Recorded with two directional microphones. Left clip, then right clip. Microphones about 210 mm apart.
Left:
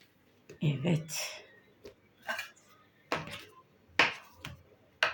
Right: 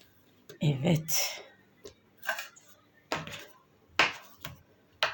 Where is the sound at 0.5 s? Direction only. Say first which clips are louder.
Right 4 dB; 40° right (ahead or behind).